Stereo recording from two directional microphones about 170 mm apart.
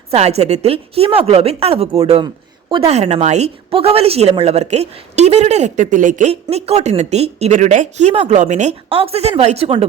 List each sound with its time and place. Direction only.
0.1 s a woman's voice: 40° right (ahead or behind)
6.3 s a woman's voice: 35° right (ahead or behind)